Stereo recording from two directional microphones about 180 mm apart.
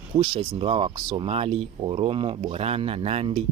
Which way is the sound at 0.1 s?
30° right (ahead or behind).